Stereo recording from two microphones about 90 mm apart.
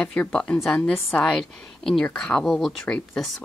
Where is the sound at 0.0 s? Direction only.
15° left (ahead or behind).